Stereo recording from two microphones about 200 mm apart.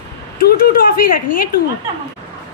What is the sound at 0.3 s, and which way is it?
Speech, 50° left (ahead or behind).